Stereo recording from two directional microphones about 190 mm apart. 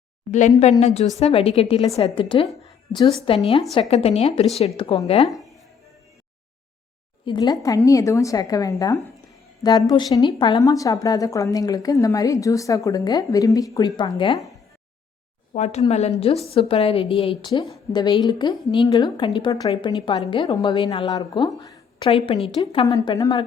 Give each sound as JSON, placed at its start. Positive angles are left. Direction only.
{"t": 0.3, "sound": "a woman's voice", "side_deg": 40}
{"t": 5.3, "sound": "a sound", "side_deg": 0}
{"t": 7.3, "sound": "a woman's voice", "side_deg": 25}
{"t": 15.5, "sound": "a woman's voice", "side_deg": 35}